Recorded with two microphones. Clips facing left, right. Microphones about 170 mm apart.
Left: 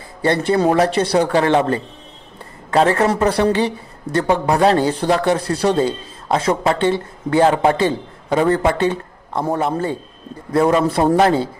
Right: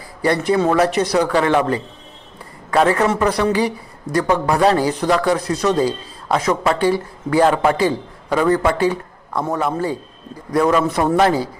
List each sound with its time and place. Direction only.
0.2 s a man's voice: 30° left (ahead or behind)